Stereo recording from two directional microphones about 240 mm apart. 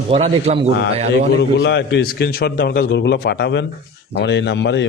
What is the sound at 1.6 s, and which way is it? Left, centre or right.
A man's voice, left.